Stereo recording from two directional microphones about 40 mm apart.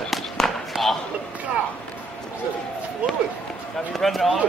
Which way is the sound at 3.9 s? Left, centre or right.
Centre.